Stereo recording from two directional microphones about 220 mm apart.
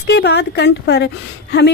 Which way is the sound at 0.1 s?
50° left (ahead or behind).